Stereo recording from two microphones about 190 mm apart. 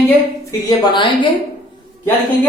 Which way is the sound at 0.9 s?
25° left (ahead or behind).